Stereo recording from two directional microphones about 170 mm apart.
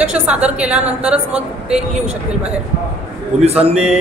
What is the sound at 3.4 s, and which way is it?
Speech, 35° right (ahead or behind).